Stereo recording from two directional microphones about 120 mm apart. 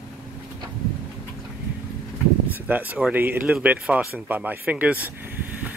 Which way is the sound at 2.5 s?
15° right (ahead or behind).